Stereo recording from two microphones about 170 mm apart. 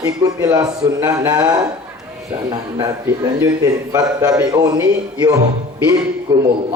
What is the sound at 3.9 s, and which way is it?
A man's voice, 20° right (ahead or behind).